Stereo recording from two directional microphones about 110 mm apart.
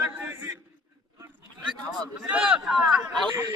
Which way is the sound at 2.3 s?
10° right (ahead or behind).